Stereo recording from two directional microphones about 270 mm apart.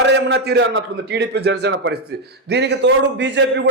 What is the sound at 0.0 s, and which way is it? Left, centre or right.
A man's voice, right.